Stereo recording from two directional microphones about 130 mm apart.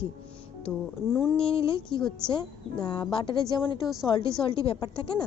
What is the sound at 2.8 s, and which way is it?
A woman's voice, 35° left (ahead or behind).